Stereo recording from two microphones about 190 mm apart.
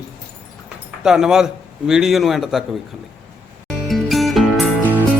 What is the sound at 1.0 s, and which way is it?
A man's voice, 5° right (ahead or behind).